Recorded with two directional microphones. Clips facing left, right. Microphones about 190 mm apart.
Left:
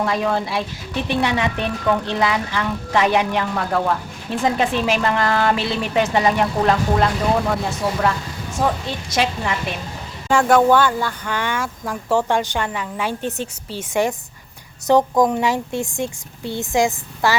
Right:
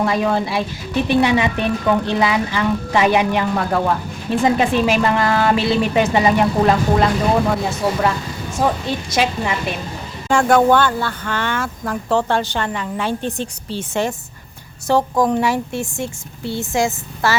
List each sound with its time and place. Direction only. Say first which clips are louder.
0.0 s a woman's voice: right 2 dB; 5° right (ahead or behind)
8.6 s a woman's voice: right 2 dB; centre (ahead or behind); by 17.3 s 15° left (ahead or behind)